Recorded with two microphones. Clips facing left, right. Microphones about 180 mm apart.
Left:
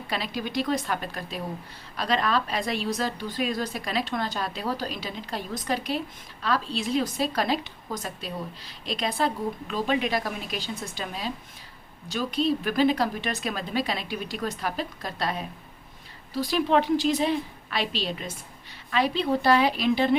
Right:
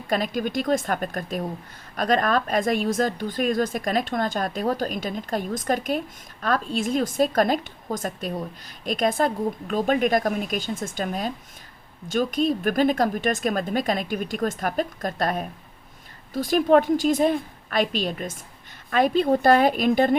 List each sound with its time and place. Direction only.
0.1 s a woman's voice: 45° right (ahead or behind)